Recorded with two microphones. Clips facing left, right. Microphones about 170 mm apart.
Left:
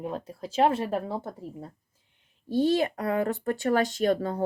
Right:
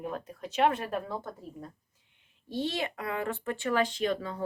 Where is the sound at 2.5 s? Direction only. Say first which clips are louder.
Left 9 dB; 40° left (ahead or behind).